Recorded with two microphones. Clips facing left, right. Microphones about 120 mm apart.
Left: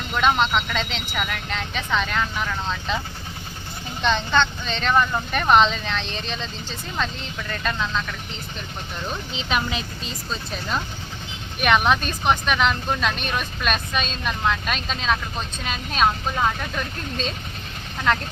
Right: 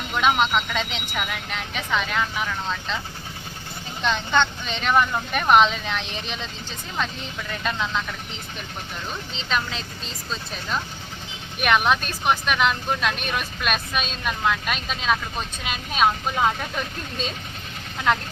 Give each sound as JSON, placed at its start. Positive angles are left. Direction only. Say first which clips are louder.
{"t": 0.2, "sound": "speech", "louder": "left 1 dB", "side_deg": -10}
{"t": 4.0, "sound": "speech", "louder": "left 1 dB", "side_deg": -5}
{"t": 9.3, "sound": "speech", "louder": "left 2 dB", "side_deg": 10}
{"t": 10.0, "sound": "speech", "louder": "left 2 dB", "side_deg": 0}